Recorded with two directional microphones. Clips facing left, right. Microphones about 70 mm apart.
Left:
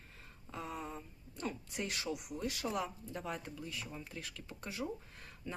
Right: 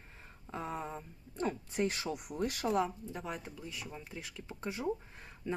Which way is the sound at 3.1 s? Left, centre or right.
Centre.